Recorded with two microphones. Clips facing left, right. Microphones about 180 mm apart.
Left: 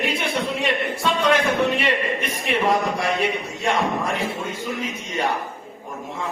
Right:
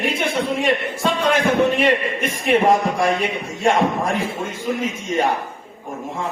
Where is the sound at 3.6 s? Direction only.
50° right (ahead or behind).